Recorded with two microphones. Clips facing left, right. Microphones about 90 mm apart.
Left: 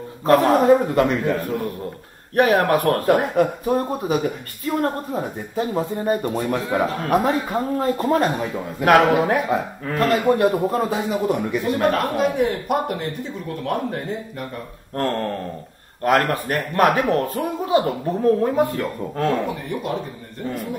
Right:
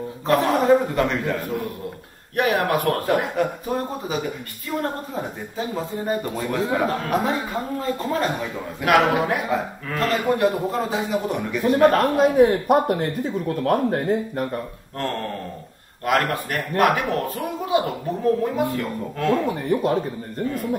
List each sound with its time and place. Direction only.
0.3 s speech: 40° left (ahead or behind)
11.6 s speech: 40° right (ahead or behind)
15.0 s speech: 40° left (ahead or behind)
19.4 s speech: 35° right (ahead or behind)